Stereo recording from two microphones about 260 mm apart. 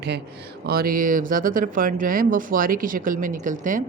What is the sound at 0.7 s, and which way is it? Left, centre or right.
Speech, right.